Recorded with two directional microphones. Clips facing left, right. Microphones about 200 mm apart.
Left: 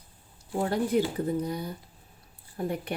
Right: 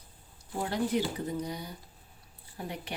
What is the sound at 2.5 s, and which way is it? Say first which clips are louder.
Speech: left 8 dB; 50° left (ahead or behind).